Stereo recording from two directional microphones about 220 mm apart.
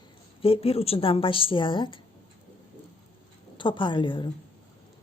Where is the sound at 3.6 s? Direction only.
20° left (ahead or behind).